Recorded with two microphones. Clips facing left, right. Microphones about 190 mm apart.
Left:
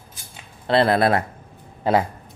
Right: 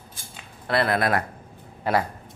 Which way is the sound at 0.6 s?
25° left (ahead or behind).